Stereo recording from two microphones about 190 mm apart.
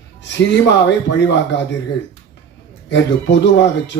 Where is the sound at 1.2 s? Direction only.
65° left (ahead or behind).